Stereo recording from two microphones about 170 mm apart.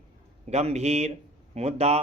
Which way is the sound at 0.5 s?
40° right (ahead or behind).